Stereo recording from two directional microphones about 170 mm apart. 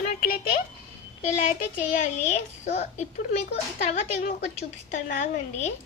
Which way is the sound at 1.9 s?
45° left (ahead or behind).